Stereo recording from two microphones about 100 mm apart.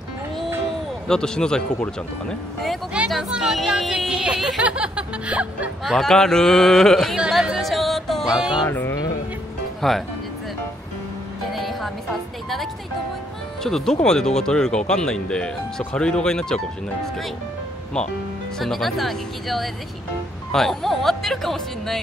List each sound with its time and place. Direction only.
1.0 s speech: 5° left (ahead or behind)
4.6 s music: 10° right (ahead or behind)
5.9 s speech: 5° left (ahead or behind)
7.2 s music: 5° right (ahead or behind)
8.6 s mantra: 25° left (ahead or behind)
9.8 s speech: centre (ahead or behind)
11.5 s music: centre (ahead or behind)
13.6 s speech: 5° left (ahead or behind)